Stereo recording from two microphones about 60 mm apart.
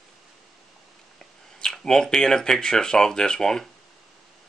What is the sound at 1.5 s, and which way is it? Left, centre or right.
Speech, centre.